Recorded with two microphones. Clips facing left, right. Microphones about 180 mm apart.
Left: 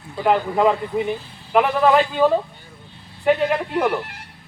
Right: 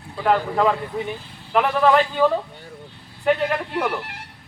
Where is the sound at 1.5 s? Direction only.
15° left (ahead or behind).